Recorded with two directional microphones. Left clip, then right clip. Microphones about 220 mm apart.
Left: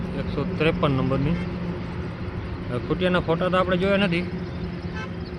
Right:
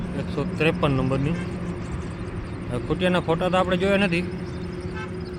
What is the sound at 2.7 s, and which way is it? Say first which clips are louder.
A man's voice: even; 5° right (ahead or behind).